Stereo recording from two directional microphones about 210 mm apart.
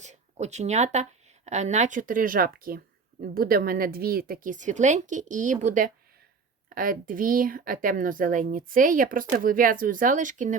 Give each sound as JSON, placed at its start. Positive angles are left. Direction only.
{"t": 0.0, "sound": "speech", "side_deg": -35}